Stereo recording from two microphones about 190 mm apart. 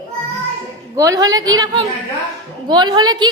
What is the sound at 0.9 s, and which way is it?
A woman's voice, 20° right (ahead or behind).